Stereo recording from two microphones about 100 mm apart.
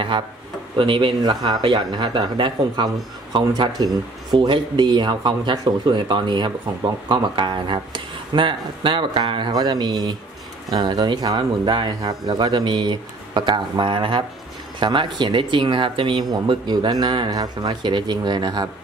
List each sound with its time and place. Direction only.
0.7 s speech: 55° right (ahead or behind)